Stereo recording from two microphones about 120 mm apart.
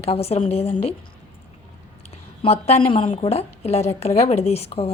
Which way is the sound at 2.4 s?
60° left (ahead or behind).